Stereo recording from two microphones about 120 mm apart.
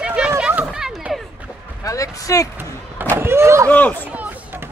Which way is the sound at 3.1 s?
20° right (ahead or behind).